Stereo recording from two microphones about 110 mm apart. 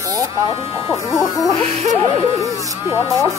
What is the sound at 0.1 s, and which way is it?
Speech, 30° right (ahead or behind).